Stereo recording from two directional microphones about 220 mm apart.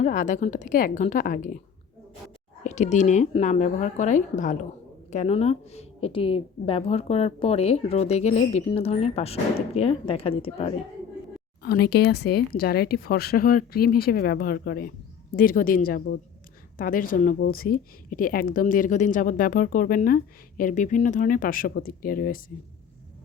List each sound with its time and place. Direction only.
0.0 s speech: 35° left (ahead or behind)
2.6 s a woman's voice: 30° left (ahead or behind)
11.6 s speech: 45° left (ahead or behind)